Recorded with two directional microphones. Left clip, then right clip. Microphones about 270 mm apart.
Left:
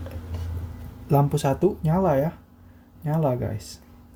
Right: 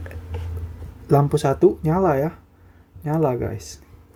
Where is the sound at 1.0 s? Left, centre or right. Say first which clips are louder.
Right 4 dB; right.